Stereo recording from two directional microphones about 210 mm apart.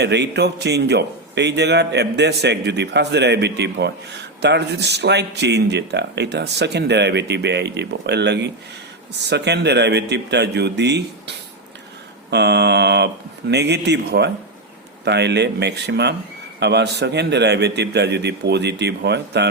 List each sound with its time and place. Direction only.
0.0 s a man's voice: 55° right (ahead or behind)
12.3 s a man's voice: 55° right (ahead or behind)